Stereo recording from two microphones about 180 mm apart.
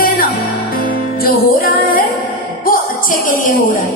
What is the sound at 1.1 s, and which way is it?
Music, 55° left (ahead or behind).